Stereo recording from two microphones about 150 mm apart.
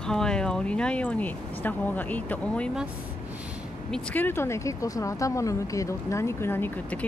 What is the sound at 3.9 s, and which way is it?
Speech, 10° left (ahead or behind).